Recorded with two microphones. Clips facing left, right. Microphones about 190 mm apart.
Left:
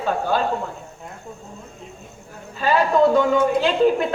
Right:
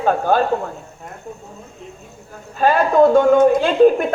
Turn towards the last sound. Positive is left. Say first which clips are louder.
# right 5 dB
turn(degrees=-50)  # may be behind; listen again after turning